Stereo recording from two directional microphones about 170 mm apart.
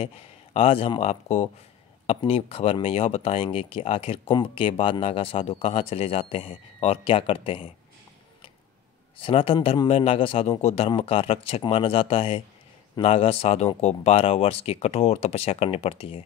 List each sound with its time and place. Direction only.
0.0 s speech: 35° left (ahead or behind)
9.2 s speech: 35° left (ahead or behind)